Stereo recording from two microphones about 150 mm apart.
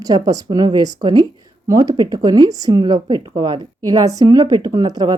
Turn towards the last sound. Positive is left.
turn(degrees=-25)  # may be behind; listen again after turning